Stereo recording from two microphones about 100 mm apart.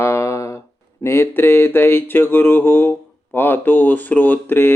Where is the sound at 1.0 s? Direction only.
25° left (ahead or behind).